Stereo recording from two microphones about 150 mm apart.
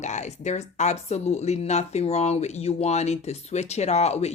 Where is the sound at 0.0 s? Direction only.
50° left (ahead or behind).